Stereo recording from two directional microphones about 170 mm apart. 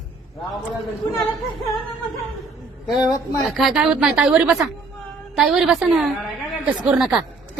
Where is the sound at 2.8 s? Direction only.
Centre (ahead or behind).